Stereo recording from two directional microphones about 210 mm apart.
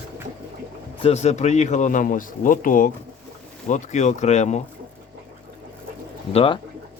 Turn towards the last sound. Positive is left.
turn(degrees=30)  # may be behind; listen again after turning